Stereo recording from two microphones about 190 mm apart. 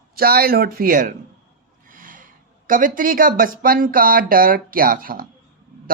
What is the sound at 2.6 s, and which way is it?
Speech, 45° right (ahead or behind).